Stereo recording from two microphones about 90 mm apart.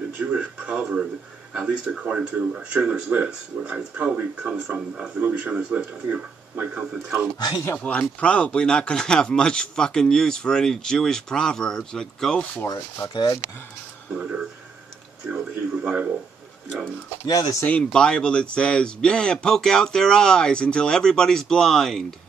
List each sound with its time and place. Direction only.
0.2 s speech: 15° right (ahead or behind)
7.3 s speech: 50° left (ahead or behind)
7.7 s speech: 15° left (ahead or behind)
12.6 s speech: 30° left (ahead or behind)
13.1 s speech: 55° left (ahead or behind)
14.1 s speech: 10° right (ahead or behind)
17.3 s speech: 40° left (ahead or behind)
17.9 s speech: 10° left (ahead or behind)